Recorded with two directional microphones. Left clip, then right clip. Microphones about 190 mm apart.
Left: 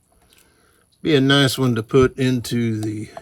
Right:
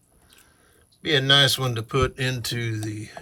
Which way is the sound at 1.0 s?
20° left (ahead or behind).